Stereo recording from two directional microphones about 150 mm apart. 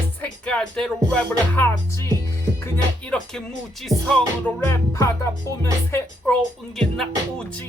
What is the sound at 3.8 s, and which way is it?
Music, 5° left (ahead or behind).